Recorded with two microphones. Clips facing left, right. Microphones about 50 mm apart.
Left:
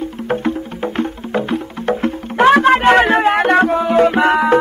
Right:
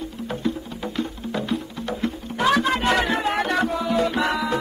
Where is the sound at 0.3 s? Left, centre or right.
Left.